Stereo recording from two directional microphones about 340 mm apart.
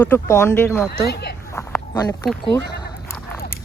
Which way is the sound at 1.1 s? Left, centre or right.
Left.